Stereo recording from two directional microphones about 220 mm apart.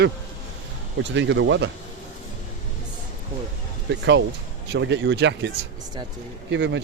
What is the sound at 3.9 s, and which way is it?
A man's voice, 55° right (ahead or behind).